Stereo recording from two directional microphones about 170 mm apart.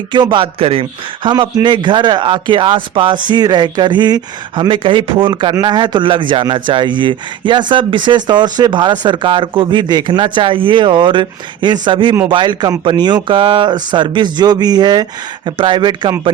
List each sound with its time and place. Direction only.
0.1 s speech: 25° right (ahead or behind)